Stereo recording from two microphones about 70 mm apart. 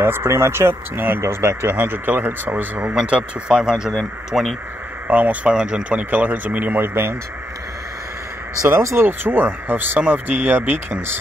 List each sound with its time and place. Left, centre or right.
0.0 s speech: right
1.2 s speech: right; by 4.6 s centre
5.0 s speech: right
8.6 s speech: right